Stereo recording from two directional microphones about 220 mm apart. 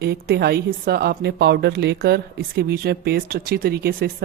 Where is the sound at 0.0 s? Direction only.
45° right (ahead or behind).